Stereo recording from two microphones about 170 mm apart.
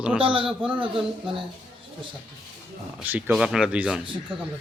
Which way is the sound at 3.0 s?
10° right (ahead or behind).